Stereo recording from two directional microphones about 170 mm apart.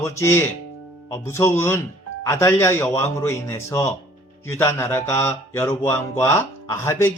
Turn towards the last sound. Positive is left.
turn(degrees=15)  # may be behind; listen again after turning